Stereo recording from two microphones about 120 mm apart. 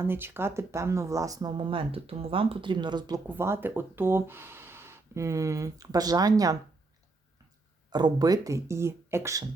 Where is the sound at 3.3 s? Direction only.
20° right (ahead or behind).